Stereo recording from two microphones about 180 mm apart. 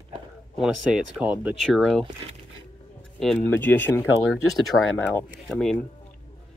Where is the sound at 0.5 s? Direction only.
5° right (ahead or behind).